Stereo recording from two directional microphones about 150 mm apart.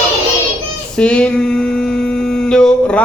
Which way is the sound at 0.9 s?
10° left (ahead or behind).